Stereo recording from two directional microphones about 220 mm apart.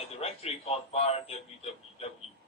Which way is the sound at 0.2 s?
25° left (ahead or behind).